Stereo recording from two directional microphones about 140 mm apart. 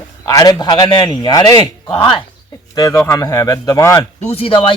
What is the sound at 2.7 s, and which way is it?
Speech, 25° left (ahead or behind).